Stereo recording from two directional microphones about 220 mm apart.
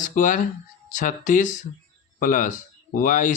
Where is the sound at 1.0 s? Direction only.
35° left (ahead or behind).